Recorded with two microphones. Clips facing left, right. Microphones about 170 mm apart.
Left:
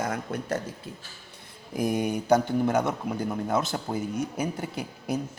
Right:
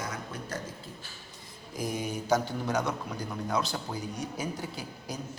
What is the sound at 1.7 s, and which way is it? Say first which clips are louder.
A man's voice: left 7 dB; 55° left (ahead or behind).